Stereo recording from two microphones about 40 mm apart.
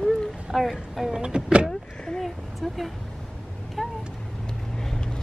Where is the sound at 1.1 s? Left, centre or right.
Right.